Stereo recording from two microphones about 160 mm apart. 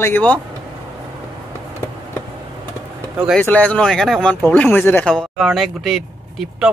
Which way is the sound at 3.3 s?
10° left (ahead or behind).